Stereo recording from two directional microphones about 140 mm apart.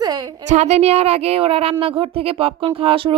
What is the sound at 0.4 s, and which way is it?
A woman's voice, 55° right (ahead or behind).